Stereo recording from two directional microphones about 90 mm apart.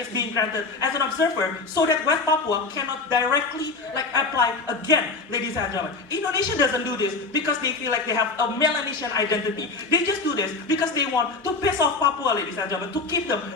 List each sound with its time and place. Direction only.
0.1 s a man's voice: 40° left (ahead or behind)